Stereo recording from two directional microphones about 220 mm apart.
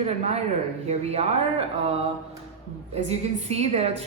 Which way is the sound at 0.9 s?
30° right (ahead or behind).